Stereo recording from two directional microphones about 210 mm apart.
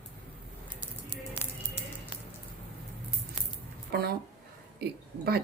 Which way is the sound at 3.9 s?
50° right (ahead or behind).